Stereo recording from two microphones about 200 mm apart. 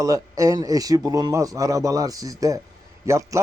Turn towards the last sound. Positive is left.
turn(degrees=-15)  # may be behind; listen again after turning